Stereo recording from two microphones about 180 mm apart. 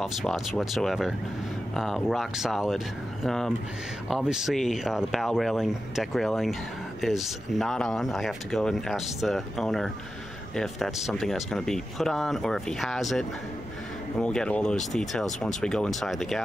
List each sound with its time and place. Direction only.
0.0 s speech: centre (ahead or behind)
14.2 s speech: 5° left (ahead or behind)